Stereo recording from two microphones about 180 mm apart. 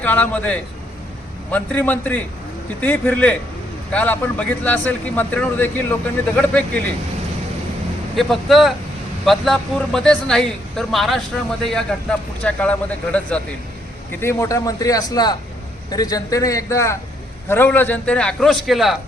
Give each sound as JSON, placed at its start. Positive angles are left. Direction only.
{"t": 0.0, "sound": "a man's voice", "side_deg": 10}
{"t": 8.1, "sound": "a man's voice", "side_deg": 0}